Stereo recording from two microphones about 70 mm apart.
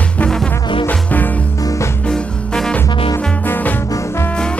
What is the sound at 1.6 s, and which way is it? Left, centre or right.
Music, left.